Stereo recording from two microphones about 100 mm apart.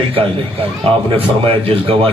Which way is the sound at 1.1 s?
70° right (ahead or behind).